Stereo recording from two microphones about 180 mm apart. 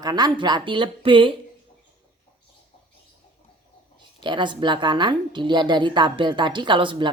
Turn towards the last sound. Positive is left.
turn(degrees=-25)  # may be behind; listen again after turning